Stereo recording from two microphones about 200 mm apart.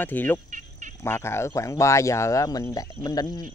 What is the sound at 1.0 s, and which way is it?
Speech, 10° left (ahead or behind).